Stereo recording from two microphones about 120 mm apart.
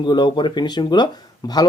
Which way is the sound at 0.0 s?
40° left (ahead or behind).